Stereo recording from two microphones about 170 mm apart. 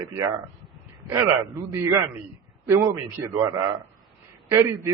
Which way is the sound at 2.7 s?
15° right (ahead or behind).